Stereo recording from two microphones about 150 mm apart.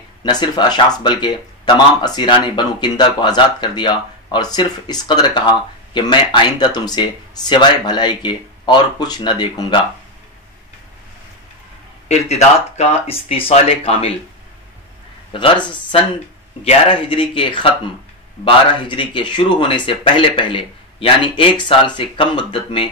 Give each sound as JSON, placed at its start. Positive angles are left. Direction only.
{"t": 0.2, "sound": "speech", "side_deg": 30}
{"t": 12.1, "sound": "speech", "side_deg": 45}
{"t": 15.3, "sound": "speech", "side_deg": 30}